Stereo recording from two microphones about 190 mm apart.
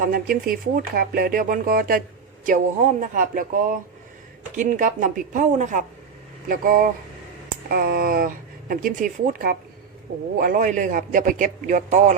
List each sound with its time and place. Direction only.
0.0 s speech: 50° right (ahead or behind)
4.5 s speech: 40° right (ahead or behind)